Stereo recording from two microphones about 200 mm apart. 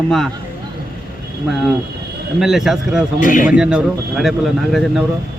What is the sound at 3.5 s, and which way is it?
Speech, 5° right (ahead or behind).